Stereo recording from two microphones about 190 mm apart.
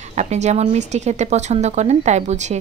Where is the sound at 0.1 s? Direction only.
35° right (ahead or behind).